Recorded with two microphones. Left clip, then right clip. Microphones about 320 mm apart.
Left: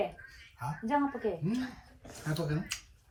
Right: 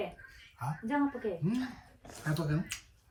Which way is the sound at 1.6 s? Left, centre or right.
Right.